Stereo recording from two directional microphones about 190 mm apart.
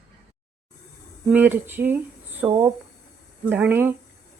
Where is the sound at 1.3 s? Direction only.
10° right (ahead or behind).